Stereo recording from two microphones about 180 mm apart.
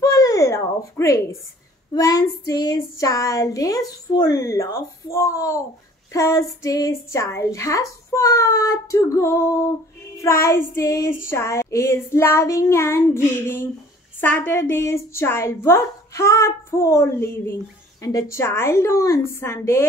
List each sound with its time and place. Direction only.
0.0 s a sound: 20° left (ahead or behind)
2.0 s child singing: 20° left (ahead or behind)
5.1 s speech: 15° left (ahead or behind)